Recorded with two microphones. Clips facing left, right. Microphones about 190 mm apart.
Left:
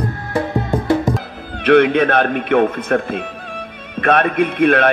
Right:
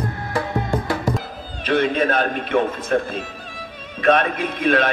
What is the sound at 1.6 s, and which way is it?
A man's voice, 65° left (ahead or behind).